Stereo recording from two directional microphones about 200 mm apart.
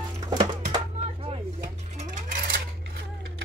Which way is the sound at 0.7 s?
30° right (ahead or behind).